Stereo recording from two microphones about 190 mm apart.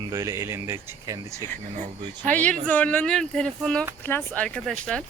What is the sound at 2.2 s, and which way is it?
Speech, 5° left (ahead or behind).